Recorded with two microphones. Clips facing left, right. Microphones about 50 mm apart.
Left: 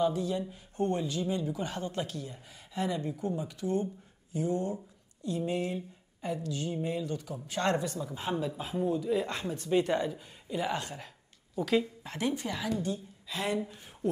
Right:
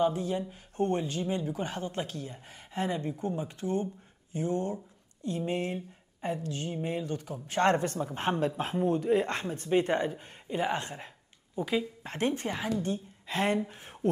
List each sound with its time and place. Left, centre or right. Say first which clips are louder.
0.0 s a woman's voice: right 1 dB; right